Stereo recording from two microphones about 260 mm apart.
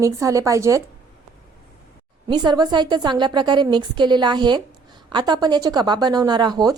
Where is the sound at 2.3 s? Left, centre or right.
Centre.